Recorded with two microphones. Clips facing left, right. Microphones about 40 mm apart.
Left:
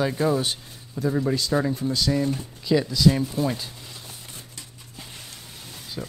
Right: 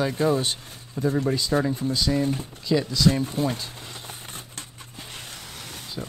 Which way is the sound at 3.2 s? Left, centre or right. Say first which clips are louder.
Even; right.